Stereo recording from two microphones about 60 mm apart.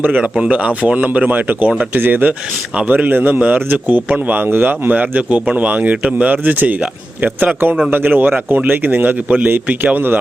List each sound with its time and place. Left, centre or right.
0.0 s speech: right